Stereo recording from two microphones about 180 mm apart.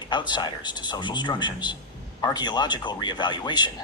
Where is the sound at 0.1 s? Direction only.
25° left (ahead or behind).